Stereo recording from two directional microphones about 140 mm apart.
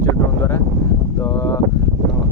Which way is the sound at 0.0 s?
20° left (ahead or behind).